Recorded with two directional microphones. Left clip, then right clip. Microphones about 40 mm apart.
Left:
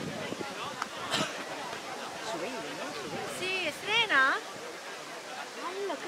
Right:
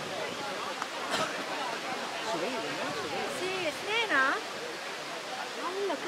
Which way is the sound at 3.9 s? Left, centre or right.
Left.